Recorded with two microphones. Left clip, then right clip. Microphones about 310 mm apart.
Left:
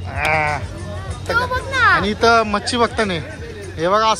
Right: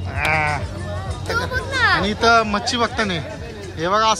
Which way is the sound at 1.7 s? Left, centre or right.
Left.